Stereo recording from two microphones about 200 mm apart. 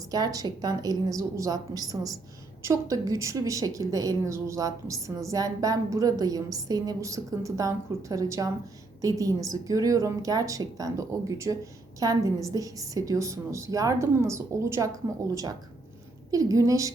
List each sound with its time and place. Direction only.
0.1 s a woman's voice: 20° right (ahead or behind)
16.3 s a woman's voice: 15° right (ahead or behind)